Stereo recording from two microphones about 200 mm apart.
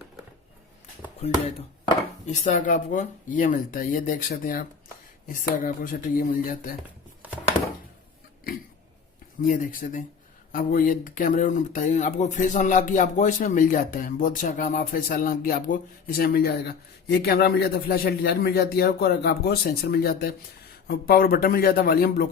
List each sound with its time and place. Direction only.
1.2 s speech: 30° left (ahead or behind)
9.4 s speech: 45° left (ahead or behind)